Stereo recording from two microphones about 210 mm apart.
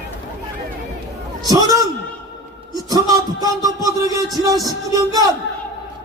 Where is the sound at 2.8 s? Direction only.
15° right (ahead or behind).